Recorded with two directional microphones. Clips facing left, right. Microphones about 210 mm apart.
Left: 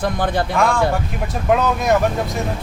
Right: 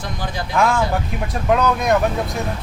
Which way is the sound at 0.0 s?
55° left (ahead or behind).